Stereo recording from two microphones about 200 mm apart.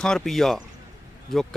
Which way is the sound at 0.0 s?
Centre (ahead or behind).